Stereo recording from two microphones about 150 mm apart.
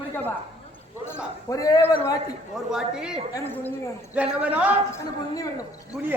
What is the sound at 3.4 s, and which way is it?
Speech, 15° left (ahead or behind).